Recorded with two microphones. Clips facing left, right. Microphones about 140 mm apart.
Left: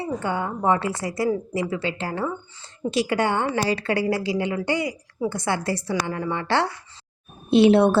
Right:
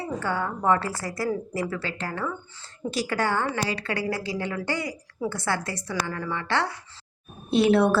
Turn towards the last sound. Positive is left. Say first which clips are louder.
# left 4 dB
turn(degrees=25)  # may be behind; listen again after turning